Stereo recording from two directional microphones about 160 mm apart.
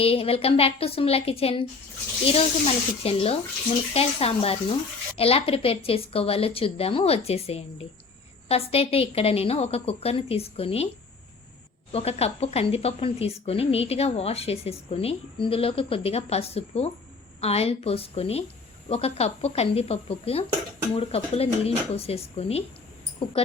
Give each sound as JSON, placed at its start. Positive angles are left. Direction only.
{"t": 0.0, "sound": "speech", "side_deg": 35}
{"t": 11.9, "sound": "speech", "side_deg": 40}